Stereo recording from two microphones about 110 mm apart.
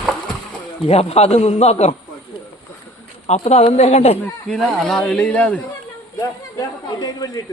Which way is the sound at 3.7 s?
75° left (ahead or behind).